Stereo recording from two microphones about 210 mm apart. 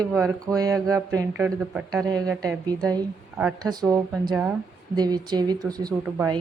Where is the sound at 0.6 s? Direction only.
15° right (ahead or behind).